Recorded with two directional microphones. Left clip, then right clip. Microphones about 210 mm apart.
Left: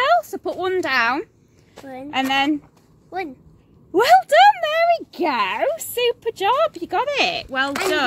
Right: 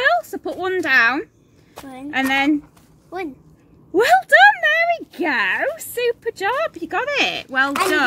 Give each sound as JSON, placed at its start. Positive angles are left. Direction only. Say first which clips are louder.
{"t": 0.0, "sound": "a woman's voice", "louder": "even", "side_deg": 35}
{"t": 3.9, "sound": "speech", "louder": "even", "side_deg": 35}